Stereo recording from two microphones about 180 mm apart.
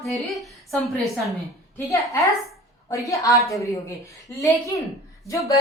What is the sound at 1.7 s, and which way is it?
A man's voice, 15° left (ahead or behind).